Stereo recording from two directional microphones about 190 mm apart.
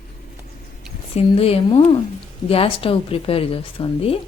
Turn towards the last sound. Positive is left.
turn(degrees=30)  # may be behind; listen again after turning